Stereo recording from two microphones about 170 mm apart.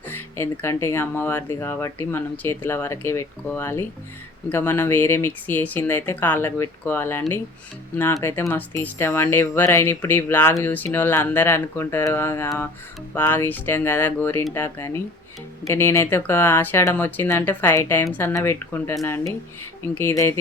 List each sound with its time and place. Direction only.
0.3 s speech: 15° left (ahead or behind)
20.0 s speech: 15° left (ahead or behind)